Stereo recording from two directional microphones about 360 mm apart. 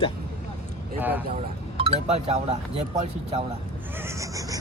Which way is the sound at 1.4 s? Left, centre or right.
Centre.